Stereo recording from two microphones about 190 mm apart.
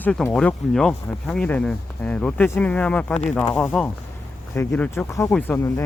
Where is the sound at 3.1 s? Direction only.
35° left (ahead or behind).